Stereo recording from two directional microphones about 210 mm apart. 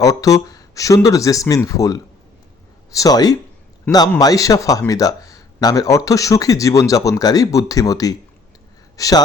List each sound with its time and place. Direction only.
0.0 s speech: 15° left (ahead or behind)